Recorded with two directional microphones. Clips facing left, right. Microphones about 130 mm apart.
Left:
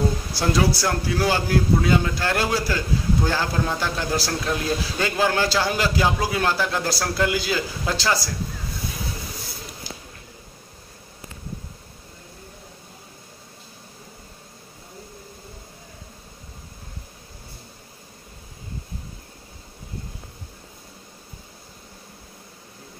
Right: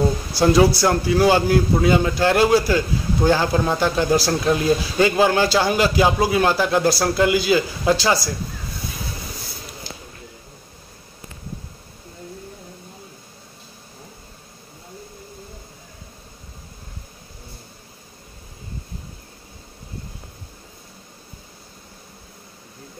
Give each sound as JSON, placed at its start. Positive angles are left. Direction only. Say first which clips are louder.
{"t": 0.3, "sound": "a man's voice", "louder": "right 8 dB", "side_deg": -20}